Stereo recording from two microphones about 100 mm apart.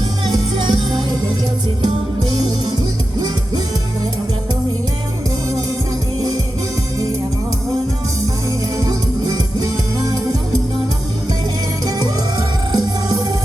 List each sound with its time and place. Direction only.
0.3 s music: 50° right (ahead or behind)
8.8 s music: 40° right (ahead or behind)
11.9 s music: 40° right (ahead or behind)